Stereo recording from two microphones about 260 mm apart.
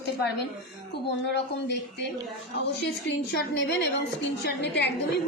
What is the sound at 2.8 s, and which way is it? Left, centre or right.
A woman's voice, left.